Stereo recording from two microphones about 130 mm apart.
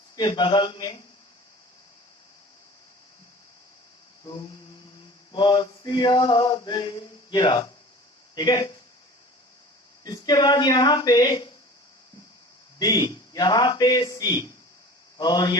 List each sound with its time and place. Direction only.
0.2 s male singing: 35° left (ahead or behind)
4.2 s a sound: 35° left (ahead or behind)
5.3 s male singing: 35° left (ahead or behind)
10.0 s male singing: 30° left (ahead or behind)
12.8 s male singing: 30° left (ahead or behind)